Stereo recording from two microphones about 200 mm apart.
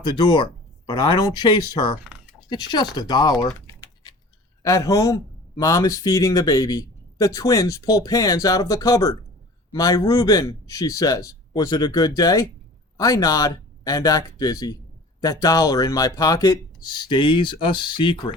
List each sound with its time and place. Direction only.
0.0 s a man's voice: 20° left (ahead or behind)